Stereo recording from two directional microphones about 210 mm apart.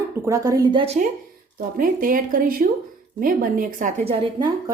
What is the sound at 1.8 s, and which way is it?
Speech, 40° right (ahead or behind).